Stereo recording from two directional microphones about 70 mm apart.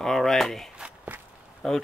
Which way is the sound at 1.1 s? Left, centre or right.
Right.